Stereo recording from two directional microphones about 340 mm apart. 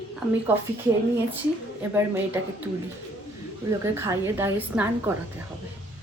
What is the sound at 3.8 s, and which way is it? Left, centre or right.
A woman's voice, centre.